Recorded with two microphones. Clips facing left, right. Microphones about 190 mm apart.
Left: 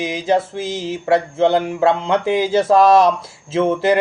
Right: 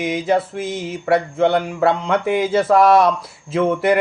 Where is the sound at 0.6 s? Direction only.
90° left.